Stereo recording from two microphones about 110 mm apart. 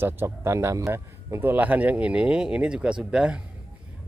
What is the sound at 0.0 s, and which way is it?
Speech, 25° right (ahead or behind).